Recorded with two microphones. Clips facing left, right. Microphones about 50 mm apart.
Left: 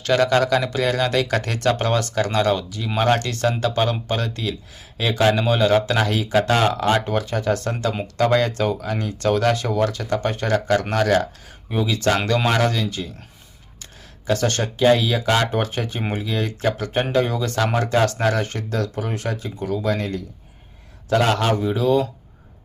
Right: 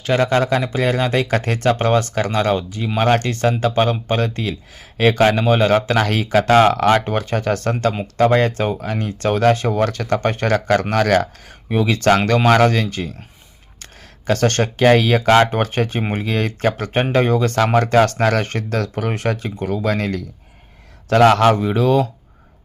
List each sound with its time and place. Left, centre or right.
0.0 s a man's voice: right
14.3 s speech: right